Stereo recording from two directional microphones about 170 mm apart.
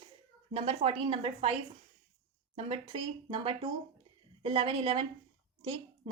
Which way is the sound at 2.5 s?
30° right (ahead or behind).